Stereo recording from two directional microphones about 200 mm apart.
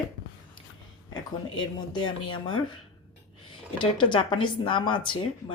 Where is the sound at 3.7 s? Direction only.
25° left (ahead or behind).